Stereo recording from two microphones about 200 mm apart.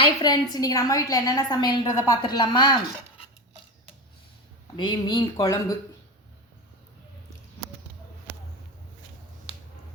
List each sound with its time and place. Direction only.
0.2 s a woman's voice: 20° left (ahead or behind)
4.8 s a woman's voice: 20° left (ahead or behind)